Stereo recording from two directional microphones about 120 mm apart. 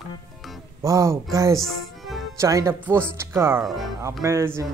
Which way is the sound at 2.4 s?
25° right (ahead or behind).